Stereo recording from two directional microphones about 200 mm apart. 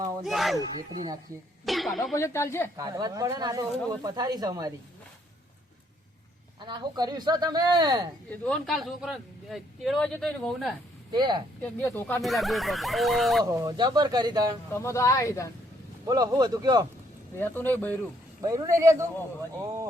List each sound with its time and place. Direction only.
0.2 s speech: centre (ahead or behind)
1.6 s speech: centre (ahead or behind)
2.1 s speech: 15° left (ahead or behind)
2.7 s speech: 20° right (ahead or behind)
6.7 s speech: 20° right (ahead or behind)
8.3 s speech: 5° left (ahead or behind)
11.1 s speech: 20° right (ahead or behind)
11.6 s speech: 10° left (ahead or behind)
13.4 s speech: 20° right (ahead or behind)
14.7 s speech: 15° left (ahead or behind)
16.0 s speech: 20° right (ahead or behind)
17.3 s speech: 10° left (ahead or behind)
18.4 s a man's voice: 15° right (ahead or behind)